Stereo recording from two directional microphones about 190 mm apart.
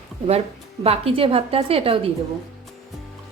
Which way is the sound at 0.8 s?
30° right (ahead or behind).